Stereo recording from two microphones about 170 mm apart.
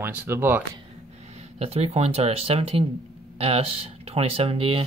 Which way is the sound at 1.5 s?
35° right (ahead or behind).